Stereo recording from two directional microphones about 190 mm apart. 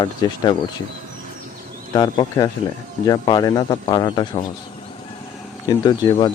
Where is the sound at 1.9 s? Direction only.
20° left (ahead or behind).